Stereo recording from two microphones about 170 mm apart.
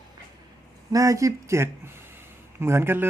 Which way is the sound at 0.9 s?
20° right (ahead or behind).